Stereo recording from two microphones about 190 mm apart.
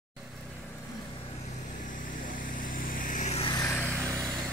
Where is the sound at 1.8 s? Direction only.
45° left (ahead or behind).